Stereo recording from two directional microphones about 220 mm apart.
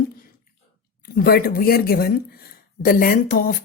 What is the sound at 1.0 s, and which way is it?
Speech, 45° left (ahead or behind).